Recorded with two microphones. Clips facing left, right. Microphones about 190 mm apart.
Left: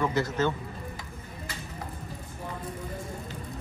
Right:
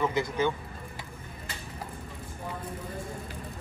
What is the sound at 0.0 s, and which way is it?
Speech, 15° right (ahead or behind).